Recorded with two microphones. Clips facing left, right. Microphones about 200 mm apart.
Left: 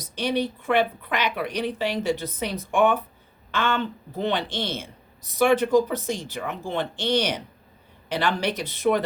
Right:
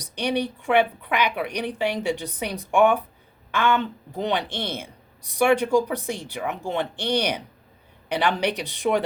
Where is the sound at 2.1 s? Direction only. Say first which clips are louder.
Left 1 dB; 15° right (ahead or behind).